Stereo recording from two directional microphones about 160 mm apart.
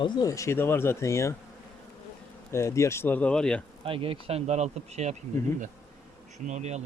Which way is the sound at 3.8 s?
35° right (ahead or behind).